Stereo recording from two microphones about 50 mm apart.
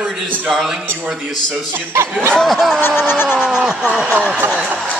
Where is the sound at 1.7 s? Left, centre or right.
Right.